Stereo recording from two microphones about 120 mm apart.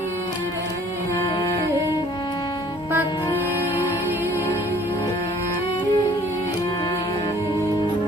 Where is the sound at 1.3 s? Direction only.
35° left (ahead or behind).